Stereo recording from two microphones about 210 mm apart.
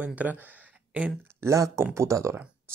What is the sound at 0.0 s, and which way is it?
Speech, 5° right (ahead or behind).